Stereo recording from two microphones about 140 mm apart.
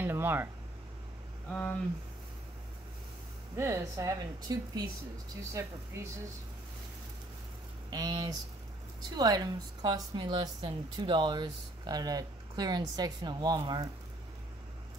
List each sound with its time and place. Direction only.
0.0 s a sound: 15° right (ahead or behind)
1.5 s speech: 10° left (ahead or behind)
3.5 s a woman's voice: 20° right (ahead or behind)
7.9 s a woman's voice: 30° right (ahead or behind)
13.6 s speech: 40° right (ahead or behind)